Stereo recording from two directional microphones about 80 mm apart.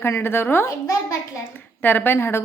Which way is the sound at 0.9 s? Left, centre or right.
Left.